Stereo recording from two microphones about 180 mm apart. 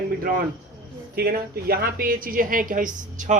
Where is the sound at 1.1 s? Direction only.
60° right (ahead or behind).